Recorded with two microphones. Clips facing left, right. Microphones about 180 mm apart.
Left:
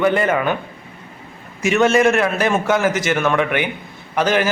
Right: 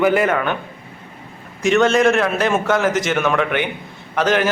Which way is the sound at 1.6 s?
5° left (ahead or behind).